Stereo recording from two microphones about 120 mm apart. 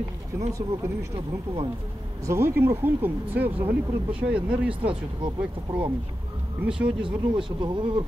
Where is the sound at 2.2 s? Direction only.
20° right (ahead or behind).